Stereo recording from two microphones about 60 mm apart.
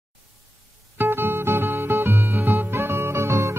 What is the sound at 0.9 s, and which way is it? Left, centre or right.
Music, right.